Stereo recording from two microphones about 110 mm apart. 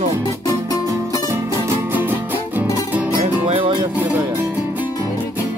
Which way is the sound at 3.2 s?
60° right (ahead or behind).